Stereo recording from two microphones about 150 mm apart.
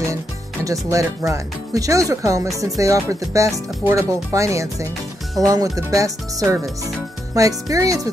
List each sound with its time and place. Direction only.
0.7 s speech: 20° right (ahead or behind)